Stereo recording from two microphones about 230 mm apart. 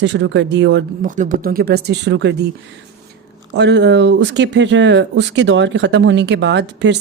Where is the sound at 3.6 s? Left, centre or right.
Right.